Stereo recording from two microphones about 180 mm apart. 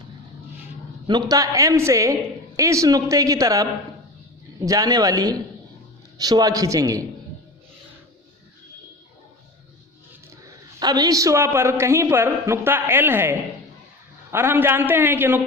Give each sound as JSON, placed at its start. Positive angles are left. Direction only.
{"t": 1.0, "sound": "a woman's voice", "side_deg": -20}
{"t": 10.4, "sound": "a woman's voice", "side_deg": -20}